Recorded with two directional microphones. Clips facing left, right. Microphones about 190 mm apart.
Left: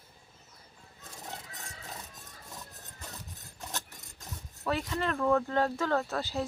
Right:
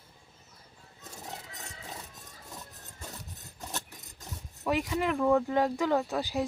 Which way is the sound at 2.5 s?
10° right (ahead or behind).